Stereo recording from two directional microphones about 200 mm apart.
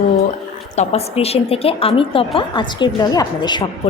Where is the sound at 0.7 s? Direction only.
30° left (ahead or behind).